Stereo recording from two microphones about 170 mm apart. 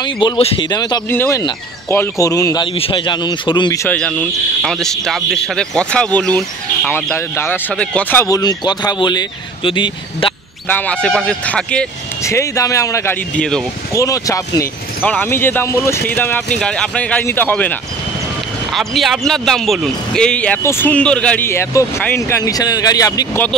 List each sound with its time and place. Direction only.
0.0 s speech: 30° left (ahead or behind)
1.0 s speech: 15° left (ahead or behind)
3.9 s speech: 5° left (ahead or behind); by 10.3 s 30° left (ahead or behind)
10.7 s speech: 10° left (ahead or behind)
12.2 s speech: 15° left (ahead or behind)
13.9 s speech: 20° left (ahead or behind)
18.7 s speech: centre (ahead or behind); by 23.4 s 20° left (ahead or behind)